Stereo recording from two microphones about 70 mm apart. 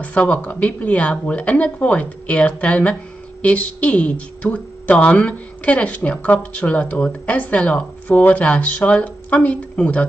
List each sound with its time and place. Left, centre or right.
0.0 s speech: centre